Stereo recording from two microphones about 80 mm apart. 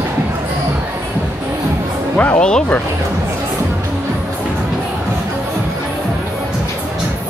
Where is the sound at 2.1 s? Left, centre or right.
Centre.